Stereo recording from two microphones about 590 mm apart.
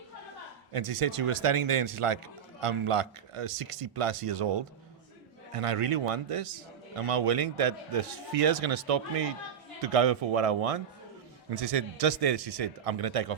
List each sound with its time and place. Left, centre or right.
0.7 s speech: right